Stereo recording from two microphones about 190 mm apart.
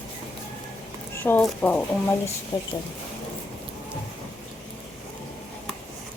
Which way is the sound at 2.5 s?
20° left (ahead or behind).